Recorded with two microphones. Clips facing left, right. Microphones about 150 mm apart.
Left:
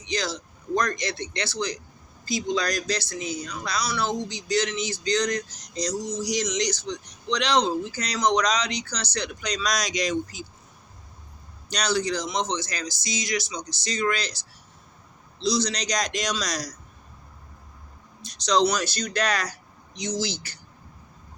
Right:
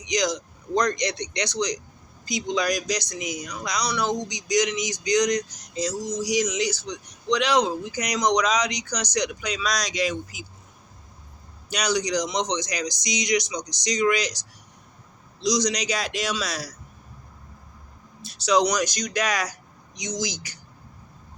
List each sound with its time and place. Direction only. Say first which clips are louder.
0.0 s speech: right 4 dB; 15° right (ahead or behind)
11.7 s speech: right 1 dB; 10° right (ahead or behind)
18.2 s speech: right 1 dB; 5° right (ahead or behind)